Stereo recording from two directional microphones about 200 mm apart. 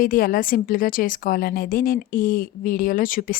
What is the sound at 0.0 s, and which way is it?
A woman's voice, 45° left (ahead or behind).